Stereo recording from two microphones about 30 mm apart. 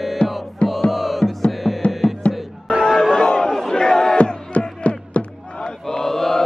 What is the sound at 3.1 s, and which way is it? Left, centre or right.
Chatter, left.